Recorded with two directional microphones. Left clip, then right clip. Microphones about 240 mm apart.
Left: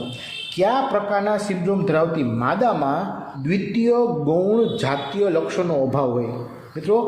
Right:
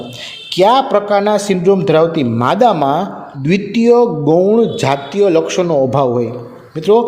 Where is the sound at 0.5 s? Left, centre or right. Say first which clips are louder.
Right 9 dB; right.